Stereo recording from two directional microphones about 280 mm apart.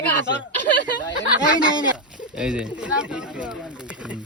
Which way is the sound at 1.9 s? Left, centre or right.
Centre.